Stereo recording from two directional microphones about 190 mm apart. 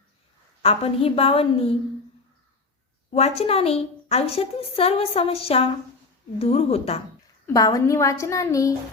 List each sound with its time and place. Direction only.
0.6 s a woman's voice: 30° left (ahead or behind)
3.1 s a woman's voice: 35° left (ahead or behind)
7.4 s a woman's voice: 20° left (ahead or behind)